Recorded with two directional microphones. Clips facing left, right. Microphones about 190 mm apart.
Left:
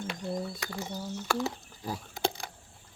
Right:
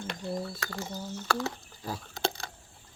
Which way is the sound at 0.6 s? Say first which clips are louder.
Even; 15° left (ahead or behind).